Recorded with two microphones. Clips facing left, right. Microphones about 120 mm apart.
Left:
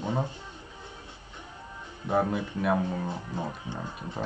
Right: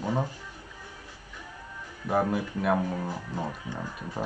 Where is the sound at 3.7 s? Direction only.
25° left (ahead or behind).